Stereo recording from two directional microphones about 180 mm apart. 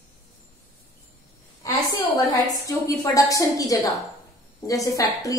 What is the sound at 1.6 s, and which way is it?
A woman's voice, 20° left (ahead or behind).